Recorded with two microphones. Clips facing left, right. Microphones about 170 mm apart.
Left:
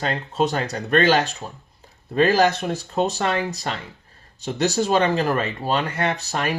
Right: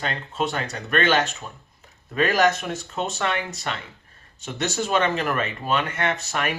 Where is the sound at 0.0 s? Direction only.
35° left (ahead or behind).